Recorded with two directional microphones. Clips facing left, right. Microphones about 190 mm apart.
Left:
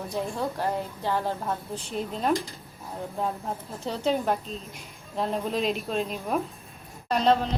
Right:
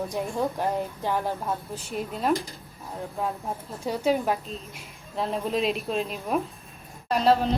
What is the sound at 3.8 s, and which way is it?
A woman's voice, 10° right (ahead or behind).